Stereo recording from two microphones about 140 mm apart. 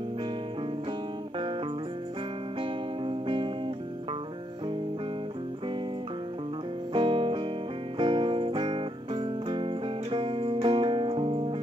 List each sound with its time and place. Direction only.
2.6 s music: 40° right (ahead or behind)
6.9 s music: 40° right (ahead or behind)